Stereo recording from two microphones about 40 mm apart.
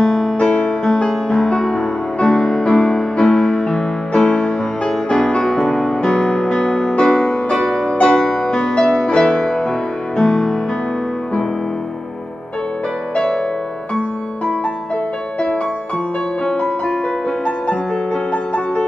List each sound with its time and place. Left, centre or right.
0.0 s music: centre
0.4 s music: left
1.0 s music: centre
10.1 s music: centre
13.1 s music: centre